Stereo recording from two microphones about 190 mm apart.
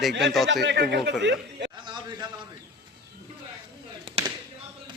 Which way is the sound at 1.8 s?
25° right (ahead or behind).